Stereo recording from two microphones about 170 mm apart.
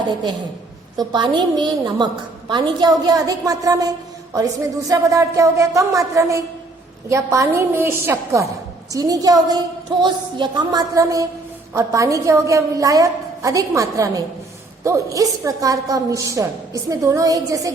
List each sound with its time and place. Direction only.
0.9 s a woman's voice: 25° right (ahead or behind)